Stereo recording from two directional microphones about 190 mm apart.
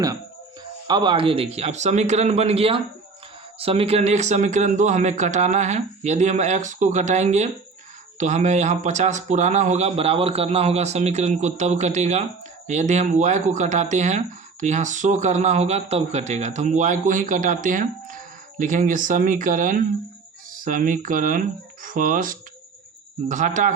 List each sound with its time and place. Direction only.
0.9 s speech: 25° right (ahead or behind); by 23.7 s 40° right (ahead or behind)